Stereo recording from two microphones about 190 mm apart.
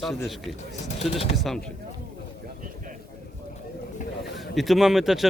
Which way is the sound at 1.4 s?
Centre (ahead or behind).